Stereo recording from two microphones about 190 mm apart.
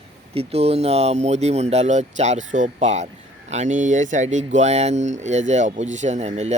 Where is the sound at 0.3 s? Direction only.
35° right (ahead or behind).